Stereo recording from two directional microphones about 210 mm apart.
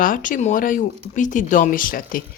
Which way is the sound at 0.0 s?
40° left (ahead or behind).